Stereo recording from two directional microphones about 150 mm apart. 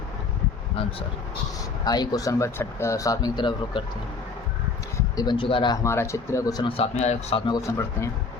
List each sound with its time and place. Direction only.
1.8 s speech: 25° left (ahead or behind)
5.1 s speech: 30° left (ahead or behind)
5.7 s speech: 20° left (ahead or behind); by 7.4 s 45° left (ahead or behind)
7.4 s speech: 25° left (ahead or behind)